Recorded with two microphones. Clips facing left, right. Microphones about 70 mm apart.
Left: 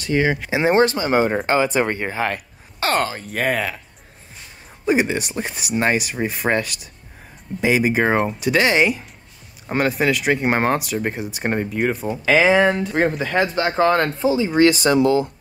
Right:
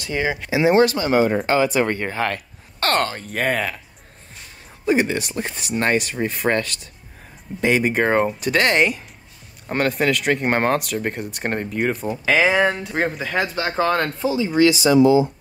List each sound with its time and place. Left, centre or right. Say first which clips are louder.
0.0 s speech: left 4 dB; centre
0.5 s speech: right 3 dB; left; by 3.8 s centre
4.8 s speech: even; centre
13.6 s speech: left 3 dB; centre
14.6 s speech: right 2 dB; left